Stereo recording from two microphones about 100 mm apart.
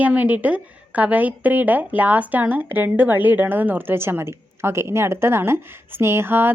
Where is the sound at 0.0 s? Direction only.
15° right (ahead or behind).